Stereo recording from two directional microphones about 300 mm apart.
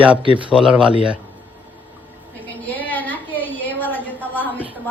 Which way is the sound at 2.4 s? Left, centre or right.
Centre.